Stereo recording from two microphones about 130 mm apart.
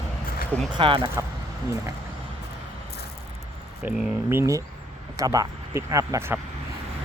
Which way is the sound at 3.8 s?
15° right (ahead or behind).